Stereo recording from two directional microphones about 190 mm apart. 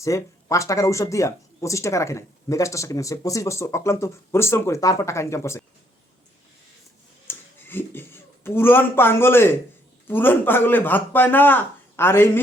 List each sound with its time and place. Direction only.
0.0 s speech: 15° left (ahead or behind)
7.3 s a sound: 10° left (ahead or behind)
10.1 s speech: 10° left (ahead or behind)